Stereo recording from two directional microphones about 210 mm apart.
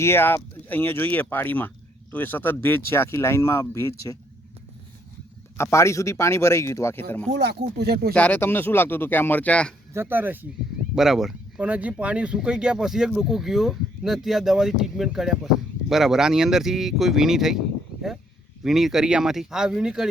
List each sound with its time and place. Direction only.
0.0 s speech: 10° left (ahead or behind)
5.5 s speech: 15° left (ahead or behind)
7.3 s speech: 55° right (ahead or behind)
8.1 s speech: 10° left (ahead or behind)
9.9 s speech: 10° right (ahead or behind)
18.6 s speech: centre (ahead or behind)